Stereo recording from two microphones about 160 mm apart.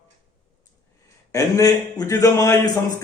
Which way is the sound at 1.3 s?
20° left (ahead or behind).